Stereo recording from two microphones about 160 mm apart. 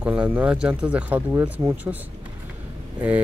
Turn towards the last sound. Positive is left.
turn(degrees=-10)  # may be behind; listen again after turning